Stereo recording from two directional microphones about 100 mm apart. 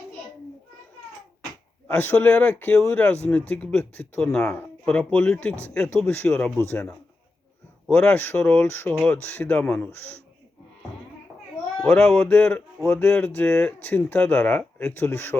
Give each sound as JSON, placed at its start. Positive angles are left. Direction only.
{"t": 1.9, "sound": "speech", "side_deg": 15}
{"t": 7.9, "sound": "speech", "side_deg": 10}
{"t": 9.9, "sound": "speech", "side_deg": 20}
{"t": 11.8, "sound": "speech", "side_deg": 10}
{"t": 12.8, "sound": "speech", "side_deg": 25}
{"t": 13.1, "sound": "speech", "side_deg": 15}
{"t": 14.9, "sound": "speech", "side_deg": 20}